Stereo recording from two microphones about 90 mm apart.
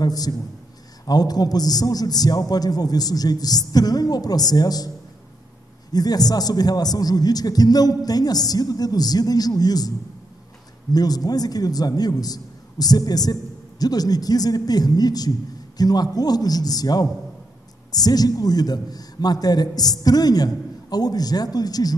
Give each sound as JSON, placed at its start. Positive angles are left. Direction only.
{"t": 0.0, "sound": "a man's voice", "side_deg": 45}